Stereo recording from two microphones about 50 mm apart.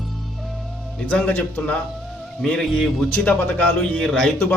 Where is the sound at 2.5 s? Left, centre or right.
Centre.